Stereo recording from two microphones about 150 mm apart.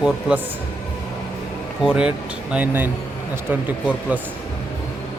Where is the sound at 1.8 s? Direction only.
5° right (ahead or behind).